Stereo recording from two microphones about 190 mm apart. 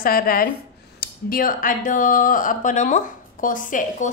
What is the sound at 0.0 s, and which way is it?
A woman's voice, 50° left (ahead or behind).